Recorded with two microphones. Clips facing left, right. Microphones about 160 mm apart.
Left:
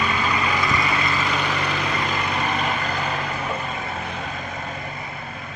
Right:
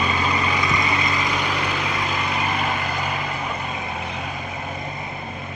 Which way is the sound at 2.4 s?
10° right (ahead or behind).